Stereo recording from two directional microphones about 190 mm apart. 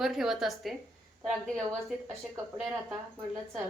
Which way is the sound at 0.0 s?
Centre (ahead or behind).